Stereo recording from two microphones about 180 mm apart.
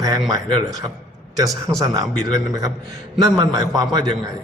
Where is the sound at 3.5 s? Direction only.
20° right (ahead or behind).